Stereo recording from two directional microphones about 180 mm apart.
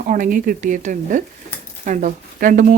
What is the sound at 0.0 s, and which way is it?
Speech, 45° right (ahead or behind).